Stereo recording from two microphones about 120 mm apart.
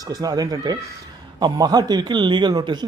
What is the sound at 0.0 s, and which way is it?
Speech, 30° right (ahead or behind).